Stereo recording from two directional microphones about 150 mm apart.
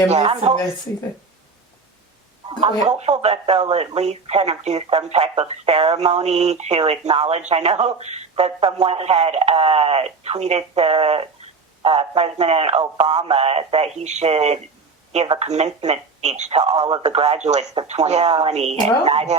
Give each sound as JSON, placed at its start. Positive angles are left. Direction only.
{"t": 0.1, "sound": "speech", "side_deg": -45}
{"t": 2.5, "sound": "speech", "side_deg": -35}
{"t": 16.8, "sound": "speech", "side_deg": -30}
{"t": 17.1, "sound": "speech", "side_deg": -45}